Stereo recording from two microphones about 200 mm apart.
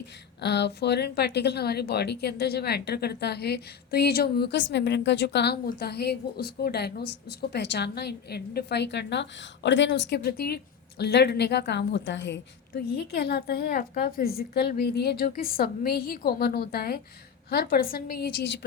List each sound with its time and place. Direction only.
0.4 s speech: 55° left (ahead or behind)